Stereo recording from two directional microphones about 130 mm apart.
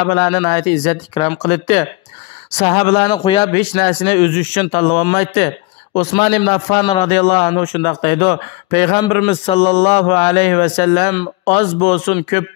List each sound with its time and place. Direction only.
0.0 s speech: 35° left (ahead or behind)
2.5 s a man's voice: 45° left (ahead or behind)
7.0 s a man's voice: 50° left (ahead or behind)
7.4 s a man's voice: 40° left (ahead or behind)
9.3 s a man's voice: 50° left (ahead or behind)